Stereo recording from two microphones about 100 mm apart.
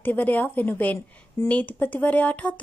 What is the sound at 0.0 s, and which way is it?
Speech, 20° left (ahead or behind).